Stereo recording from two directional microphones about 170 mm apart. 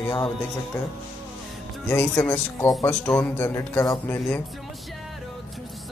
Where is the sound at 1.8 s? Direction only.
10° left (ahead or behind).